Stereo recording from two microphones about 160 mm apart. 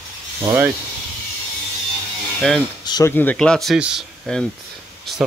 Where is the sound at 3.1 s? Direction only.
5° left (ahead or behind).